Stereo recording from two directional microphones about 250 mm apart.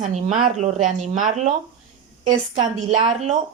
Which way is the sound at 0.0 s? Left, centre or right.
Right.